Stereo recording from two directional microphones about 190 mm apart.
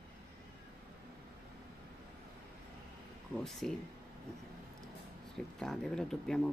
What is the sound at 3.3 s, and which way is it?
Speech, centre (ahead or behind).